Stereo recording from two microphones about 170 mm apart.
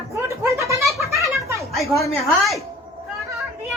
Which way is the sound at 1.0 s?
15° right (ahead or behind).